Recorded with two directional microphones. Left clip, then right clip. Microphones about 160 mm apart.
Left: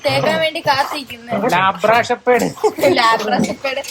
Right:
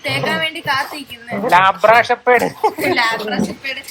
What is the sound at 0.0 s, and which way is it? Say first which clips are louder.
Speech: left 3 dB; 90° left.